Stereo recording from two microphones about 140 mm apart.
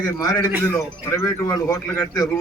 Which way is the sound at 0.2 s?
25° left (ahead or behind).